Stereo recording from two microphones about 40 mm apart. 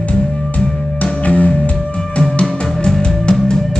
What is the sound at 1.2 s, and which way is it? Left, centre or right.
Music, left.